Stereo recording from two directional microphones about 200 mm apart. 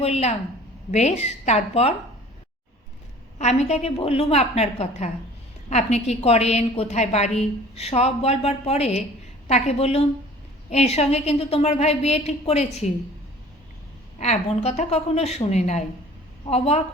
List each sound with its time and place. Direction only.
0.0 s a woman's voice: 30° left (ahead or behind)
3.3 s a woman's voice: 35° left (ahead or behind)
14.2 s a woman's voice: 35° left (ahead or behind)